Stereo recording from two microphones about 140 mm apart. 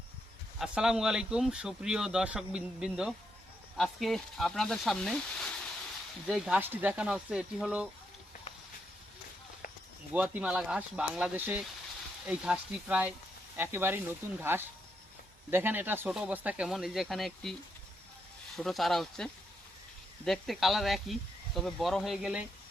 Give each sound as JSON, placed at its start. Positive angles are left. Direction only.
{"t": 0.6, "sound": "speech", "side_deg": -5}
{"t": 6.2, "sound": "speech", "side_deg": -5}
{"t": 10.1, "sound": "speech", "side_deg": -10}
{"t": 18.5, "sound": "speech", "side_deg": 0}